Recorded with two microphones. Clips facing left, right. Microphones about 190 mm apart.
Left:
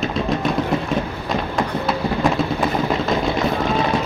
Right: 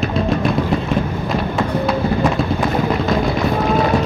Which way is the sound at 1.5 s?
Centre (ahead or behind).